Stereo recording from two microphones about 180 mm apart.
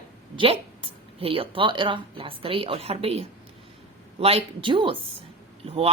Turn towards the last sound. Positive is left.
turn(degrees=-35)  # may be behind; listen again after turning